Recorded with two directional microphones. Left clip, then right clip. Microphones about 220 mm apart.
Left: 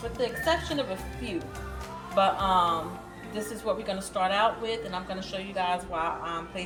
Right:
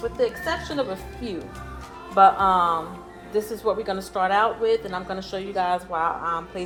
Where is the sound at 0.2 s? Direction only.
15° right (ahead or behind).